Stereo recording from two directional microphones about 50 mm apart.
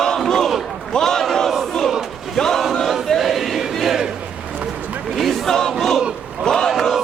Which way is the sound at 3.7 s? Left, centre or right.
Centre.